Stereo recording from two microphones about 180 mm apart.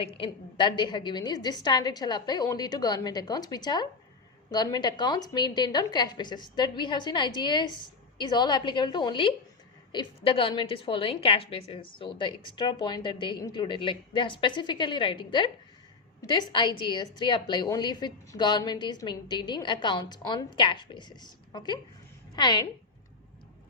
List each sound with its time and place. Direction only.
0.0 s a woman's voice: 30° left (ahead or behind)